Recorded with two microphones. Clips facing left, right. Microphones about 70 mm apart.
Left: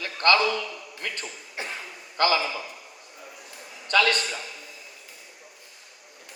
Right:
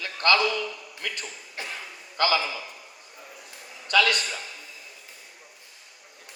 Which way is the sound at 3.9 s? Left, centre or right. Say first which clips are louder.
Even; left.